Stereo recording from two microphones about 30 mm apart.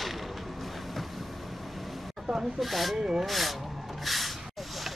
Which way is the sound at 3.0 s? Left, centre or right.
Centre.